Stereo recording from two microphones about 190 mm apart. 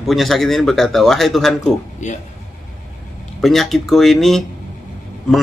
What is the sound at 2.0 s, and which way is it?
Speech, 40° left (ahead or behind).